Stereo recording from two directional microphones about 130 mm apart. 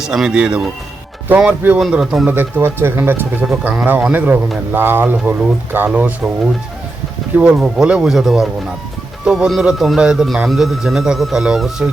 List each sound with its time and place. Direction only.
0.0 s a man's voice: 5° right (ahead or behind)
2.3 s speech: 15° right (ahead or behind)
7.3 s a man's voice: 10° right (ahead or behind)